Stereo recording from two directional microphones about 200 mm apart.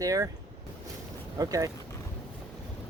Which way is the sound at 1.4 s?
15° right (ahead or behind).